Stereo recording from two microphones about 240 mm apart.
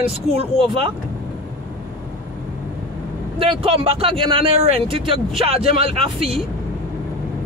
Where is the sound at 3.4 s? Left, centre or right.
Right.